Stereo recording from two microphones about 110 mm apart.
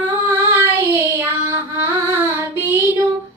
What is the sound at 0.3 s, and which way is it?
Child singing, 20° right (ahead or behind).